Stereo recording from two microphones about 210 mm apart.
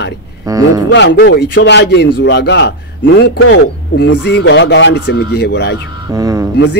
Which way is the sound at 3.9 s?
55° left (ahead or behind).